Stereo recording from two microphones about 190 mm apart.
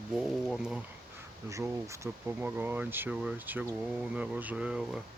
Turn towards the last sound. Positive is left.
turn(degrees=-5)  # may be behind; listen again after turning